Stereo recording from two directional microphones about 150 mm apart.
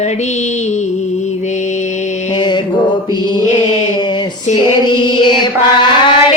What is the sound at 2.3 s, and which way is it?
Mantra, 30° left (ahead or behind).